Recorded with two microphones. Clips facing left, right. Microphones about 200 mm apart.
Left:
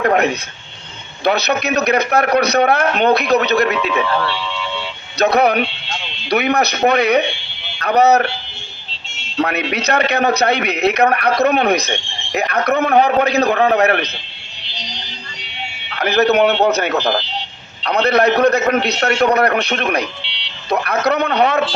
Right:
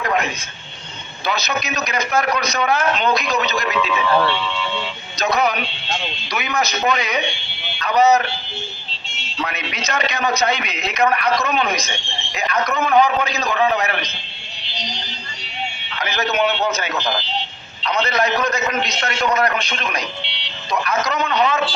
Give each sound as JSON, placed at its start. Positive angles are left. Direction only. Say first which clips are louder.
{"t": 0.0, "sound": "a man's voice", "louder": "left 7 dB", "side_deg": 60}
{"t": 5.1, "sound": "a man's voice", "louder": "left 6 dB", "side_deg": 60}
{"t": 9.4, "sound": "a man's voice", "louder": "left 8 dB", "side_deg": 60}
{"t": 16.0, "sound": "a man's voice", "louder": "left 8 dB", "side_deg": 60}